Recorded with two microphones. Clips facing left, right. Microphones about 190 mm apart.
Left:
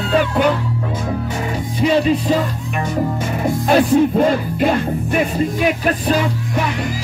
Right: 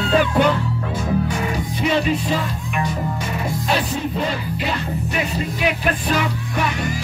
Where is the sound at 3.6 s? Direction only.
50° left (ahead or behind).